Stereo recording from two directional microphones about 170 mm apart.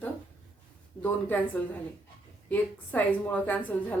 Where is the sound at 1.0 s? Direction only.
10° left (ahead or behind).